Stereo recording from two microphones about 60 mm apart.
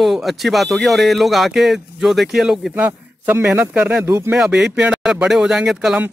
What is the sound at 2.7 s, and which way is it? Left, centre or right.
A man's voice, right.